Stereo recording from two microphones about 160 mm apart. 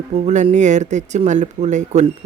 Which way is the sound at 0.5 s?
50° right (ahead or behind).